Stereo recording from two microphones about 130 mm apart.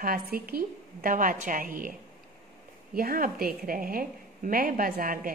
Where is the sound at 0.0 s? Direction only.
90° right.